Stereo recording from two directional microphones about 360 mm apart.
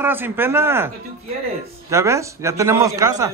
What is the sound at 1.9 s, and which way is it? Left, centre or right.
A man's voice, centre.